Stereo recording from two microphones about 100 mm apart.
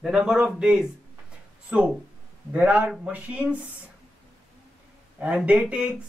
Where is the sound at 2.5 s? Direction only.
15° right (ahead or behind).